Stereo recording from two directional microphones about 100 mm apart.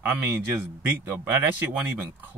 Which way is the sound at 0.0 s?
20° right (ahead or behind).